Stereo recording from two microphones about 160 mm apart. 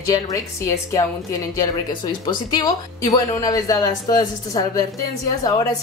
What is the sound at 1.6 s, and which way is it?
A woman's voice, 30° left (ahead or behind).